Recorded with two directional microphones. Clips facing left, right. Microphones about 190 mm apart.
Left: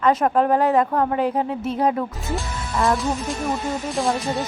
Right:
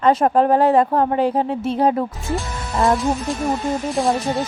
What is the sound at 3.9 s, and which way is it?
Speech, centre (ahead or behind).